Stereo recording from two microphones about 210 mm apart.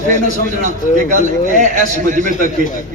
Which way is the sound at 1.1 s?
35° right (ahead or behind).